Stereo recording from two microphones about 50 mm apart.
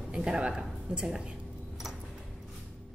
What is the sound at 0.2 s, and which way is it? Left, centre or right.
Speech, centre.